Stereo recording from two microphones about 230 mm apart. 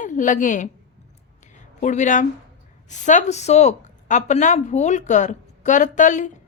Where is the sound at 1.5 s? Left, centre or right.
Left.